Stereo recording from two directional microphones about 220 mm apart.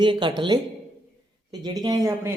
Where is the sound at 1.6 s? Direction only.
15° right (ahead or behind).